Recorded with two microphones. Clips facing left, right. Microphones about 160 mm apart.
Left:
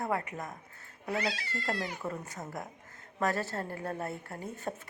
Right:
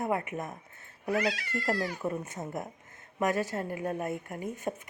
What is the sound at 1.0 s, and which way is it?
Speech, 30° left (ahead or behind).